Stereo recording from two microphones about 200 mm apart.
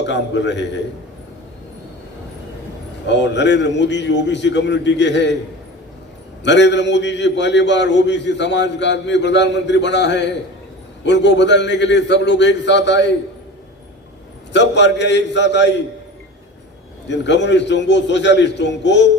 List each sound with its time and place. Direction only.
0.0 s a man's voice: 60° left (ahead or behind)
3.1 s a man's voice: 60° left (ahead or behind)
6.4 s a man's voice: 60° left (ahead or behind)
14.5 s a man's voice: 60° left (ahead or behind)
17.1 s a man's voice: 60° left (ahead or behind)